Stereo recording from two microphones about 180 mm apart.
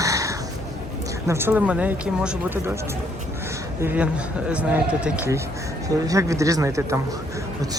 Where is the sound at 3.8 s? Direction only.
10° right (ahead or behind).